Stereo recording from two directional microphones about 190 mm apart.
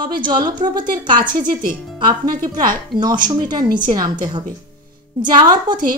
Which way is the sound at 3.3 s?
20° right (ahead or behind).